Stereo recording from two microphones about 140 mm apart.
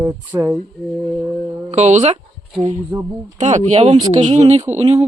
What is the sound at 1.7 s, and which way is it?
Speech, 55° right (ahead or behind).